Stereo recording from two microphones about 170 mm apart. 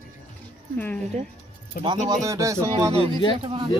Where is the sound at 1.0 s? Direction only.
40° right (ahead or behind).